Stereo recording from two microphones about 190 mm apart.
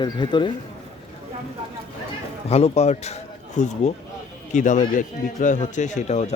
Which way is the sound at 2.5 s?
35° left (ahead or behind).